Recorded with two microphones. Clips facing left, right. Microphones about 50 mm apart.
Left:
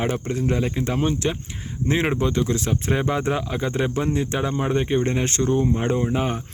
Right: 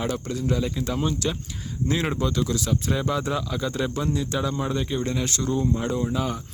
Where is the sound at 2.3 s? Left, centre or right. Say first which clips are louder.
Left 2 dB; left.